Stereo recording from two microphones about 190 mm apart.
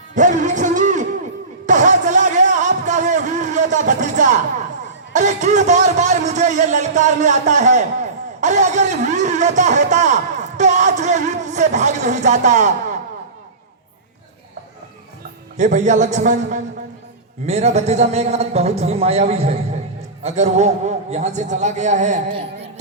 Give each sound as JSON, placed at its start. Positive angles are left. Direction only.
{"t": 0.1, "sound": "music", "side_deg": -40}
{"t": 5.1, "sound": "a man's voice", "side_deg": -40}
{"t": 15.5, "sound": "a man's voice", "side_deg": -40}